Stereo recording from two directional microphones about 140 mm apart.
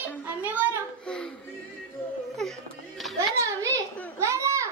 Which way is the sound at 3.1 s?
20° right (ahead or behind).